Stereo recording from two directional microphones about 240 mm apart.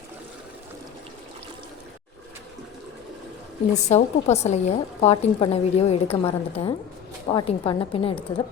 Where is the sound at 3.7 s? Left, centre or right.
Left.